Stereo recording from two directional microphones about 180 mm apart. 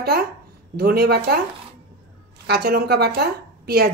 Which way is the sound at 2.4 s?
60° right (ahead or behind).